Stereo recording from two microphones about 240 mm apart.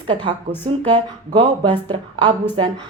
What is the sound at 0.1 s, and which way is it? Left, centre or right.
A woman's voice, right.